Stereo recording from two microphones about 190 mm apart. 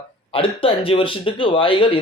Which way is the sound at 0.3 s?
30° left (ahead or behind).